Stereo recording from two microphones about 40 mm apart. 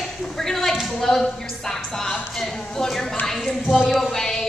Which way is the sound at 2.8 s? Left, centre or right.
Centre.